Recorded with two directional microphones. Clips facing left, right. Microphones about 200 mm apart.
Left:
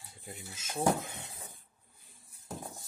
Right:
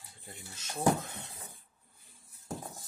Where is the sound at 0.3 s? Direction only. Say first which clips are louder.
Left 2 dB; 10° left (ahead or behind).